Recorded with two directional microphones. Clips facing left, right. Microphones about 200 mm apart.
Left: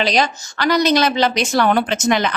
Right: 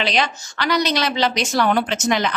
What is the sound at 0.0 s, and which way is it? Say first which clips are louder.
A woman's voice: left 4 dB; 40° left (ahead or behind).